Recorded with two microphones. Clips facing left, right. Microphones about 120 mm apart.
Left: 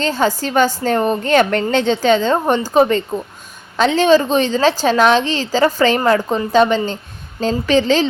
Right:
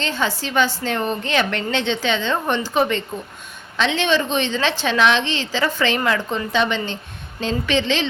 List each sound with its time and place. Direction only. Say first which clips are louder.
0.0 s a woman's voice: left 6 dB; 40° left (ahead or behind)